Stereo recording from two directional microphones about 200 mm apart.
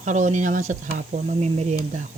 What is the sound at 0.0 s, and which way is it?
Speech, 40° right (ahead or behind).